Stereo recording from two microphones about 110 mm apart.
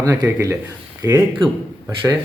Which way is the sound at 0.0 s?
25° right (ahead or behind).